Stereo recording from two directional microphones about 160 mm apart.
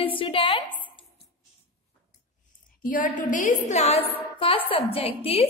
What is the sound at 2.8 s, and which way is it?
A woman's voice, 55° left (ahead or behind).